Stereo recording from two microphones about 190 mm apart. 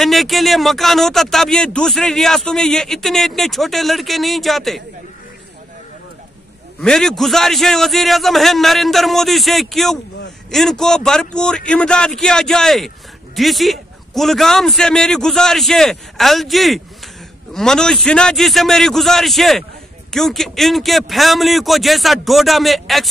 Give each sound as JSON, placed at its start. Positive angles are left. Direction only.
{"t": 0.0, "sound": "a man's voice", "side_deg": 0}
{"t": 6.8, "sound": "a man's voice", "side_deg": 5}